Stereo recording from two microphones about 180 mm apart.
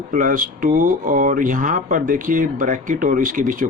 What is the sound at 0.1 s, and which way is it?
Speech, 50° right (ahead or behind).